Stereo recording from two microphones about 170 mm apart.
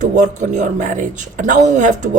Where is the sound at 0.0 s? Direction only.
45° right (ahead or behind).